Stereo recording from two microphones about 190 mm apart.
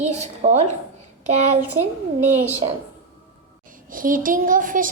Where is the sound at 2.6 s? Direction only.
30° right (ahead or behind).